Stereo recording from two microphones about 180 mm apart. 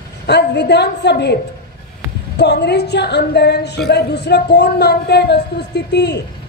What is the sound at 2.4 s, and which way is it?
Speech, 70° left (ahead or behind).